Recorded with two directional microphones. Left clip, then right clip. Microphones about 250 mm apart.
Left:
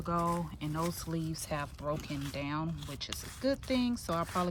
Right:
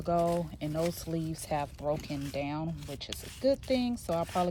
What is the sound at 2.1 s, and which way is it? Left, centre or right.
Speech, centre.